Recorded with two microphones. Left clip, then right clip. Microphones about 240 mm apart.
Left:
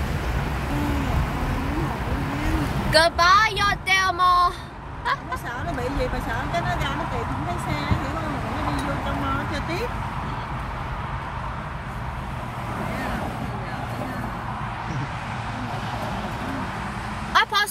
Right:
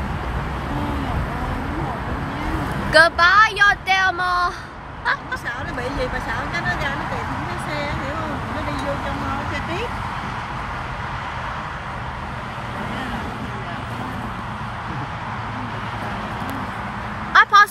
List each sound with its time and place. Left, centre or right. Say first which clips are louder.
2.9 s speech: right 3 dB; centre
6.5 s speech: right 2 dB; left
17.3 s vehicle: right 8 dB; centre